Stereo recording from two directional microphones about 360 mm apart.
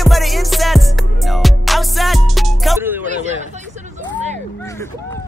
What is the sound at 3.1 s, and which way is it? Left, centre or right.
Hubbub, centre.